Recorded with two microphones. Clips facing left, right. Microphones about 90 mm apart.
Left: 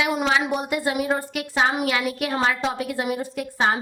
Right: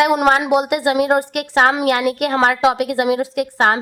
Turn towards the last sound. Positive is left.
turn(degrees=-65)  # may be behind; listen again after turning